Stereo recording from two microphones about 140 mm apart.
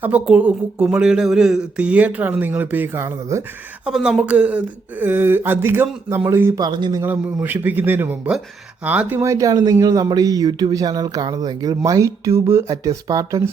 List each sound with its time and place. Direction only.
0.0 s speech: 10° right (ahead or behind)
3.8 s speech: 5° right (ahead or behind)
6.6 s speech: 30° right (ahead or behind)
7.0 s speech: 15° right (ahead or behind)